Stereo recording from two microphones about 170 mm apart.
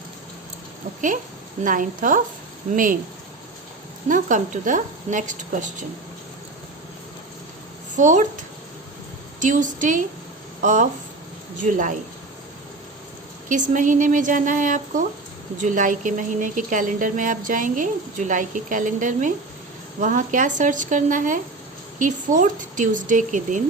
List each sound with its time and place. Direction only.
1.6 s speech: 50° right (ahead or behind)
4.1 s speech: 50° right (ahead or behind)
7.9 s speech: 50° right (ahead or behind)
13.5 s speech: 50° right (ahead or behind)